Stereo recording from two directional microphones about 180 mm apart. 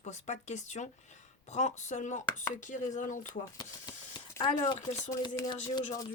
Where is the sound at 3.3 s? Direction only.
25° left (ahead or behind).